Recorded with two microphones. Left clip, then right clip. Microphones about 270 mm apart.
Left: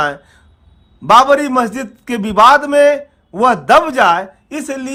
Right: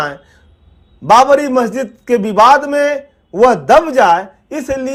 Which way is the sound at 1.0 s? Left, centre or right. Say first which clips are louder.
Right 1 dB; centre.